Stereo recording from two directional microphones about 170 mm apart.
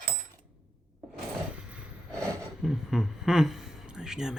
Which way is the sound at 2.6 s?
Centre (ahead or behind).